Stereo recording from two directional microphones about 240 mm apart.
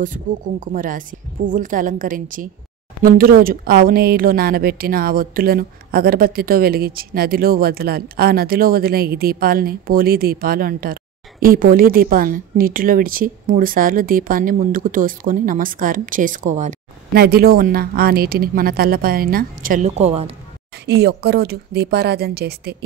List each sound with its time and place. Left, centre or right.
0.0 s a woman's voice: right
20.8 s speech: right